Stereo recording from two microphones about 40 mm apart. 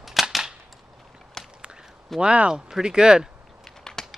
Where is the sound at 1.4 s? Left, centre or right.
Centre.